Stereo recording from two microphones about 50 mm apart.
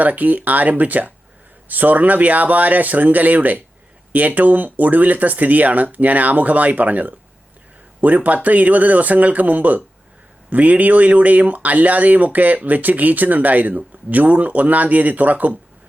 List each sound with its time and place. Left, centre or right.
0.0 s speech: right